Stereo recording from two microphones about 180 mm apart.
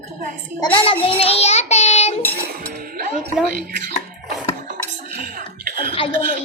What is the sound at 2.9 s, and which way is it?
Speech, 55° right (ahead or behind).